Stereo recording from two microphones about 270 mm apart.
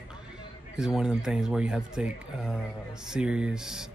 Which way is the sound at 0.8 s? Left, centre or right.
Centre.